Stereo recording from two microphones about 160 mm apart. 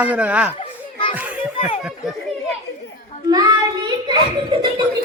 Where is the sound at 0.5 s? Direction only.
35° left (ahead or behind).